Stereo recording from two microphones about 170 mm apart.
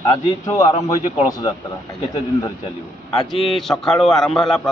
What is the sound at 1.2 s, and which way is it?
Speech, 25° left (ahead or behind).